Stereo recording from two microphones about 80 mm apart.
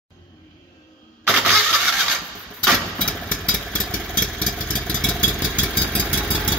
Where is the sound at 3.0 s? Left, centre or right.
Centre.